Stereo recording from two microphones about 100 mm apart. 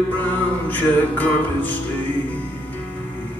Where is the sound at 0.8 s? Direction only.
15° left (ahead or behind).